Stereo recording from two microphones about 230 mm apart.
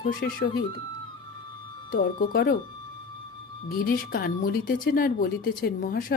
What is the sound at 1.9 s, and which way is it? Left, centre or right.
Speech, left.